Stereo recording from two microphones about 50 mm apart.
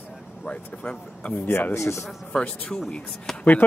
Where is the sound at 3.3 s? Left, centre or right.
Centre.